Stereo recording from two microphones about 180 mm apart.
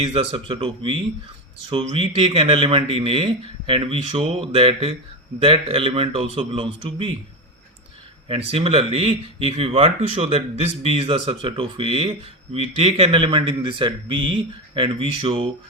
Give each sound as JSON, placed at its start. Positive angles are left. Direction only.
{"t": 0.0, "sound": "speech", "side_deg": -30}
{"t": 8.3, "sound": "speech", "side_deg": -30}